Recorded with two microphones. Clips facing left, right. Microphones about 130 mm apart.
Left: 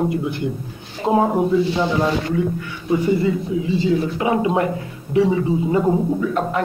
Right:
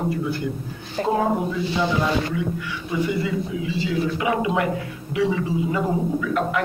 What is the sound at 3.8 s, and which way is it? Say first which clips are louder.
A man's voice: left 2 dB; 30° left (ahead or behind).